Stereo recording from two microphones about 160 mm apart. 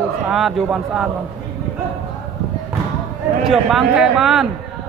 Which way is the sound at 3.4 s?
Centre (ahead or behind).